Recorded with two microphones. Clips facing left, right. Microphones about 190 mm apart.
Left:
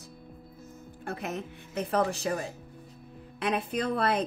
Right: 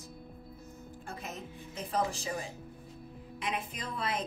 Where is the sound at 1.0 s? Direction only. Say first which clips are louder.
Left 9 dB; 65° left (ahead or behind).